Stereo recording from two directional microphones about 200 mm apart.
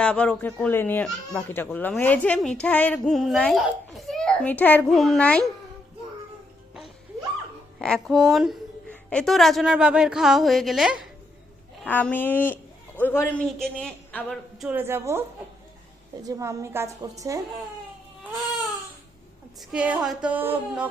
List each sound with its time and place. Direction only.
0.0 s speech: 5° left (ahead or behind)
7.8 s a man's voice: centre (ahead or behind)
14.7 s a woman's voice: 10° right (ahead or behind)
16.2 s a woman's voice: 15° right (ahead or behind)
19.7 s a woman's voice: 5° right (ahead or behind)